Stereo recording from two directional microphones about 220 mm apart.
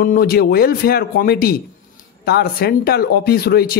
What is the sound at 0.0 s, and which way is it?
Speech, 40° left (ahead or behind).